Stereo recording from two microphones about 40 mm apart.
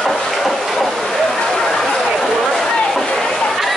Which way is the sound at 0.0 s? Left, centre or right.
Centre.